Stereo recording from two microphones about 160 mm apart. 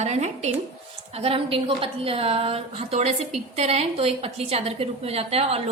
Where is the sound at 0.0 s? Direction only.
45° right (ahead or behind).